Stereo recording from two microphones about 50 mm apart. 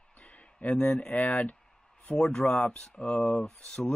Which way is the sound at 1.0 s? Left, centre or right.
Left.